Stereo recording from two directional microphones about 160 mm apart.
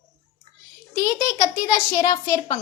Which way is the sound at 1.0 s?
20° left (ahead or behind).